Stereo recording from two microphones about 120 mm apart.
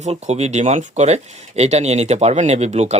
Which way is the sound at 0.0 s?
70° right (ahead or behind).